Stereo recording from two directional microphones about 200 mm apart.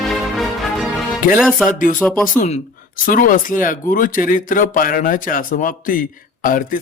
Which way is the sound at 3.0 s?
45° left (ahead or behind).